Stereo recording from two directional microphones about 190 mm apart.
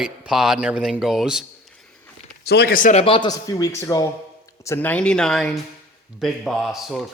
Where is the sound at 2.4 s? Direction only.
55° left (ahead or behind).